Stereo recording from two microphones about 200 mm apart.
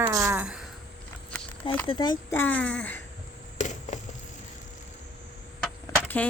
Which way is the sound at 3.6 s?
35° left (ahead or behind).